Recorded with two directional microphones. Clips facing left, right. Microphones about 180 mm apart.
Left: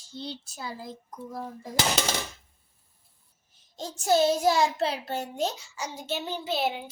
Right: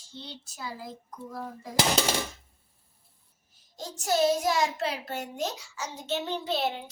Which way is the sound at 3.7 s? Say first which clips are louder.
Left 4 dB; 25° left (ahead or behind).